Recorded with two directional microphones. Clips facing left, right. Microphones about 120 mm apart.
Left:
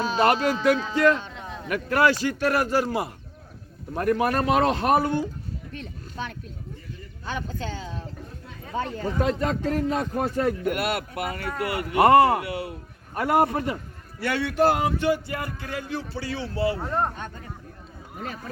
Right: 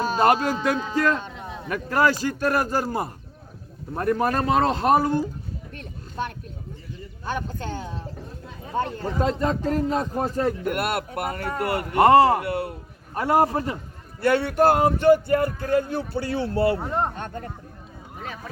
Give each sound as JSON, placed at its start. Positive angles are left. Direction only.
{"t": 0.5, "sound": "speech", "side_deg": -10}
{"t": 1.6, "sound": "a man's voice", "side_deg": -30}
{"t": 3.9, "sound": "a man's voice", "side_deg": -30}
{"t": 5.7, "sound": "a sound", "side_deg": -50}
{"t": 7.3, "sound": "speech", "side_deg": -50}
{"t": 8.8, "sound": "a man's voice", "side_deg": -35}
{"t": 10.7, "sound": "speech", "side_deg": -50}
{"t": 12.0, "sound": "a man's voice", "side_deg": -30}
{"t": 12.5, "sound": "a sound", "side_deg": -55}
{"t": 13.1, "sound": "a man's voice", "side_deg": -30}
{"t": 14.2, "sound": "speech", "side_deg": -45}
{"t": 16.8, "sound": "speech", "side_deg": -20}
{"t": 17.2, "sound": "speech", "side_deg": -55}